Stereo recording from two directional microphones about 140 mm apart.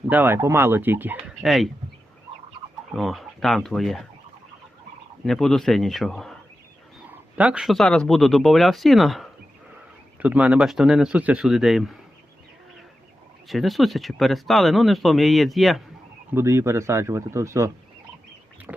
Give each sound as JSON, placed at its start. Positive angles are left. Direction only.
{"t": 0.1, "sound": "speech", "side_deg": -15}
{"t": 1.4, "sound": "speech", "side_deg": 0}
{"t": 2.9, "sound": "speech", "side_deg": 0}
{"t": 5.2, "sound": "speech", "side_deg": 5}
{"t": 7.3, "sound": "speech", "side_deg": -10}
{"t": 13.5, "sound": "speech", "side_deg": 0}
{"t": 16.3, "sound": "speech", "side_deg": -20}